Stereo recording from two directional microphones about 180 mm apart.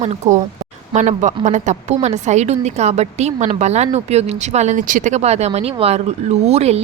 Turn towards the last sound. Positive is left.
turn(degrees=-35)  # may be behind; listen again after turning